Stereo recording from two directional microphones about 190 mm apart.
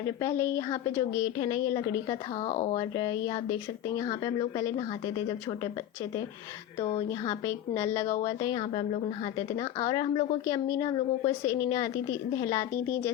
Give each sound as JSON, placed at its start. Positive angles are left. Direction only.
{"t": 0.2, "sound": "a woman's voice", "side_deg": 15}
{"t": 2.9, "sound": "a woman's voice", "side_deg": 20}
{"t": 6.7, "sound": "a woman's voice", "side_deg": 25}